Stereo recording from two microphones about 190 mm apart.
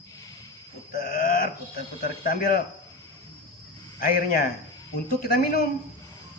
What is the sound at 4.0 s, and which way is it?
Speech, 50° left (ahead or behind).